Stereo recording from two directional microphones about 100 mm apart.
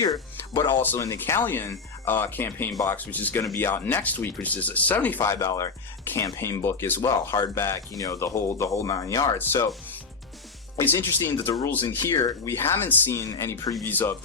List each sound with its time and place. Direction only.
0.0 s speech: 40° left (ahead or behind)
0.9 s speech: 30° left (ahead or behind)
3.4 s speech: 30° left (ahead or behind)
5.2 s speech: 30° left (ahead or behind)
10.8 s speech: 25° left (ahead or behind)
13.8 s speech: 20° left (ahead or behind)